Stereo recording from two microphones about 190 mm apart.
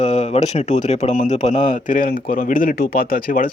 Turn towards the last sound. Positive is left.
turn(degrees=50)  # may be behind; listen again after turning